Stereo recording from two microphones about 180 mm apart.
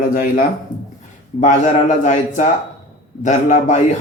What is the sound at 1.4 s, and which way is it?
A man's voice, 45° left (ahead or behind).